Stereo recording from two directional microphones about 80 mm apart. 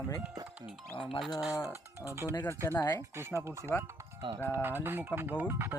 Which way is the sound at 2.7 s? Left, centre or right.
Left.